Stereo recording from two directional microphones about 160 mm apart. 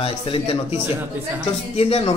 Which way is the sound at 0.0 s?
35° left (ahead or behind).